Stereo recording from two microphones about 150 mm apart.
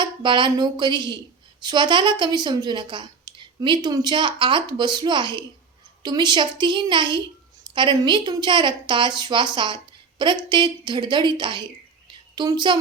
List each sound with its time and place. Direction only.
0.0 s a woman's voice: 30° right (ahead or behind)